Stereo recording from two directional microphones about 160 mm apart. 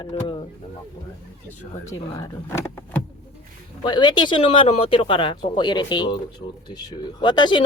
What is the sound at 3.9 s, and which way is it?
Speech, 25° left (ahead or behind).